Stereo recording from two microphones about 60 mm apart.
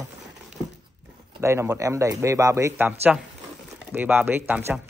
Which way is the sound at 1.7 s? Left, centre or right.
Right.